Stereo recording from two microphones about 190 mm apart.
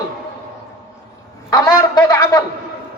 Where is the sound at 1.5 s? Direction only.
20° left (ahead or behind).